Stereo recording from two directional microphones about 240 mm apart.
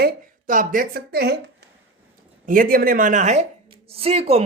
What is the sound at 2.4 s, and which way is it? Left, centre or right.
Speech, right.